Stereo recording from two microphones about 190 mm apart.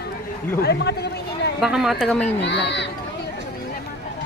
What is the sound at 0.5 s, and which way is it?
Speech, 60° left (ahead or behind).